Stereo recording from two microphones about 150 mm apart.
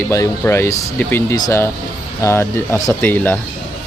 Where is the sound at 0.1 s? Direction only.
20° left (ahead or behind).